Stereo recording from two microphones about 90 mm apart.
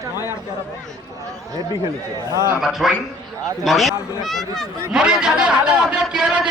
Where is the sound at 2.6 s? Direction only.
5° right (ahead or behind).